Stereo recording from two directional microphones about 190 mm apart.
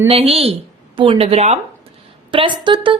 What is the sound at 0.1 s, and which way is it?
A woman's voice, 30° right (ahead or behind).